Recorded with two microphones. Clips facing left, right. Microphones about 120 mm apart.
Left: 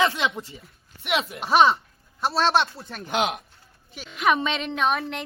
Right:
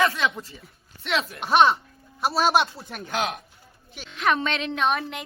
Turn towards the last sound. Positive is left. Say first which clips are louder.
# even
turn(degrees=0)  # may be behind; listen again after turning